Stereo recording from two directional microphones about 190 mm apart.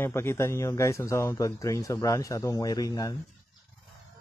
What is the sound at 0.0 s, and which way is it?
A man's voice, 15° left (ahead or behind).